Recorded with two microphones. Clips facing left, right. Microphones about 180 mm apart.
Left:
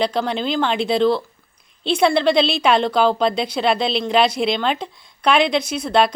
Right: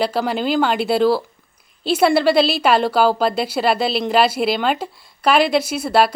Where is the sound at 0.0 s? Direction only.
5° right (ahead or behind).